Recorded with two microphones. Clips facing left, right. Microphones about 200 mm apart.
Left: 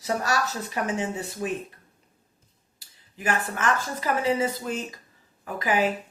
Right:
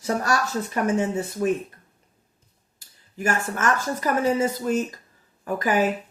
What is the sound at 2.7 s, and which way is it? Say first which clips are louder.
A woman's voice: right 8 dB; 45° right (ahead or behind).